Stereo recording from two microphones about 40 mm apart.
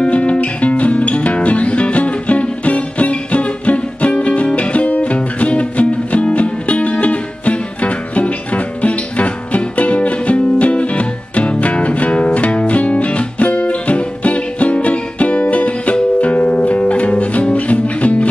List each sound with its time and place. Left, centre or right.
0.0 s music: left